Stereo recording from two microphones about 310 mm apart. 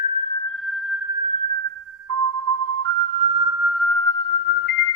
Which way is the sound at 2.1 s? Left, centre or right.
Right.